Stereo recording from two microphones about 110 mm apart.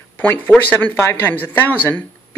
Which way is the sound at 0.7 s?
15° left (ahead or behind).